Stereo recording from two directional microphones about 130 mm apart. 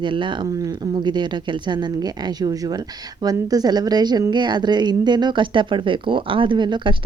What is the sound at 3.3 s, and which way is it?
A woman's voice, 30° right (ahead or behind).